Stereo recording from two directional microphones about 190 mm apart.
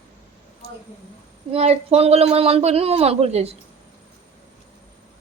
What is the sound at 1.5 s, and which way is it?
Speech, 35° right (ahead or behind).